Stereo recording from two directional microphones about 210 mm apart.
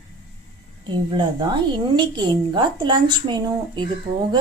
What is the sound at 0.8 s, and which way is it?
A woman's voice, 20° right (ahead or behind).